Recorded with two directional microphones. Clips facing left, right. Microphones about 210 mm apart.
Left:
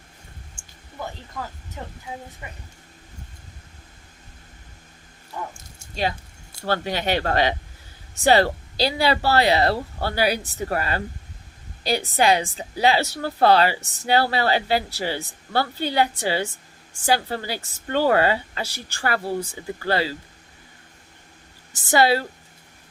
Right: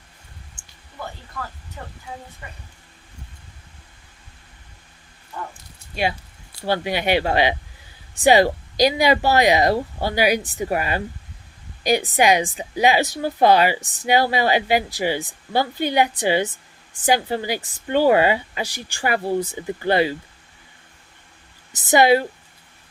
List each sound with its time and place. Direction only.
0.5 s a sound: 10° left (ahead or behind)
1.8 s speech: 20° left (ahead or behind)
6.7 s a woman's voice: 10° right (ahead or behind)
21.8 s a woman's voice: 20° right (ahead or behind)